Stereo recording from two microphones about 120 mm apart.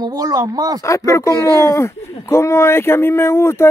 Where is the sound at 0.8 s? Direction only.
25° left (ahead or behind).